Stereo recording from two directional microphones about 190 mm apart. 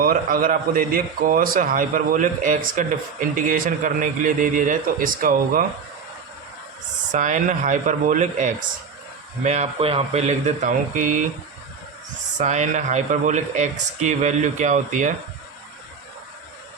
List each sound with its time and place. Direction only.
0.0 s a man's voice: 50° right (ahead or behind)
7.1 s speech: 40° right (ahead or behind)
12.4 s speech: 40° right (ahead or behind)